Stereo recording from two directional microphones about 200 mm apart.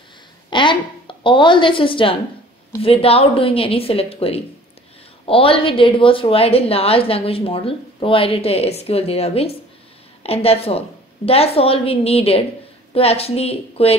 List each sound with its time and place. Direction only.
0.5 s a woman's voice: 25° left (ahead or behind)